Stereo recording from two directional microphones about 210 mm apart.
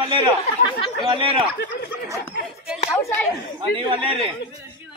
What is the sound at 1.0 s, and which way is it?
Speech, 25° right (ahead or behind).